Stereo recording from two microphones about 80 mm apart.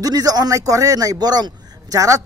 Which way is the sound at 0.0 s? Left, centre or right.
Right.